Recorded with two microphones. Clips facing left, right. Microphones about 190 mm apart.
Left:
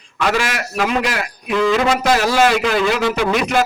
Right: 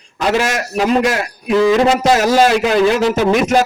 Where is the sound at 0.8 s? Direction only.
35° right (ahead or behind).